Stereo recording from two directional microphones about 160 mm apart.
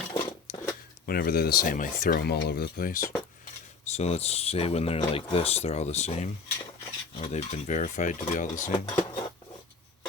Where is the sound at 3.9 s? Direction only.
40° left (ahead or behind).